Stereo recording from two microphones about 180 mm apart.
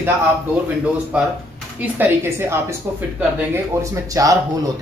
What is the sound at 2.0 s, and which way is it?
Speech, 15° right (ahead or behind).